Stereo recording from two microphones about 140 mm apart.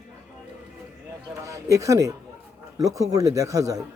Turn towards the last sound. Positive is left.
turn(degrees=-25)  # may be behind; listen again after turning